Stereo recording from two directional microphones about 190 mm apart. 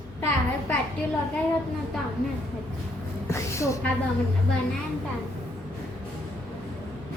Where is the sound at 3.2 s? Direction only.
15° left (ahead or behind).